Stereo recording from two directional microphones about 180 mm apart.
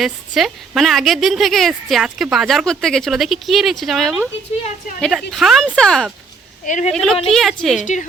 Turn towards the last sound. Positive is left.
turn(degrees=0)  # may be behind; listen again after turning